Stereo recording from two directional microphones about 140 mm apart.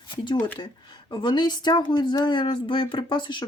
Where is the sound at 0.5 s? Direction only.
30° left (ahead or behind).